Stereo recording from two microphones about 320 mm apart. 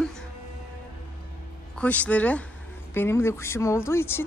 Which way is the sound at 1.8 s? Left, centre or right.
Centre.